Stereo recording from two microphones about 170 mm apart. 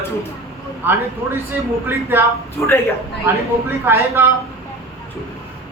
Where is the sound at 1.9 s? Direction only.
15° right (ahead or behind).